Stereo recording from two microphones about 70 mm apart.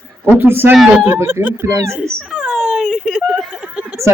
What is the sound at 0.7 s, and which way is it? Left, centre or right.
Speech, centre.